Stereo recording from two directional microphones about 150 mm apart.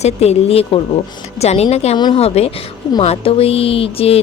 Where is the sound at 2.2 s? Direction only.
40° left (ahead or behind).